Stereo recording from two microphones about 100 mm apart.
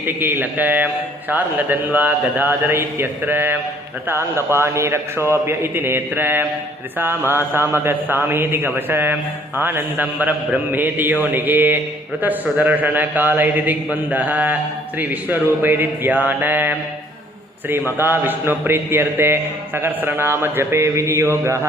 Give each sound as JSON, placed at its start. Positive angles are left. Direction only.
{"t": 0.0, "sound": "a man's voice", "side_deg": -20}